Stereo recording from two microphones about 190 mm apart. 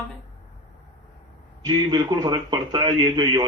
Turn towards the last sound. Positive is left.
turn(degrees=-20)  # may be behind; listen again after turning